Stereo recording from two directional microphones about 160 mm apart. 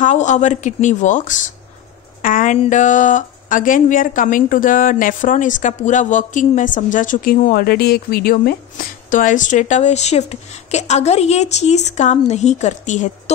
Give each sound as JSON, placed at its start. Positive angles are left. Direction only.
{"t": 0.0, "sound": "speech", "side_deg": 50}